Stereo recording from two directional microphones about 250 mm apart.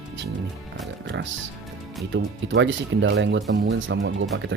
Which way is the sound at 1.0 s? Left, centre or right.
Right.